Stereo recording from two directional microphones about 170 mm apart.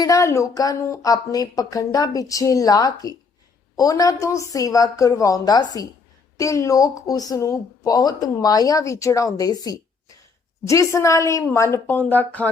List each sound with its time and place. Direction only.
0.0 s a woman's voice: 20° left (ahead or behind)